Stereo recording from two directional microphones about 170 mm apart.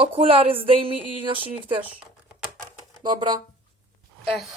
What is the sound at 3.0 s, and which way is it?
Speech, 25° right (ahead or behind).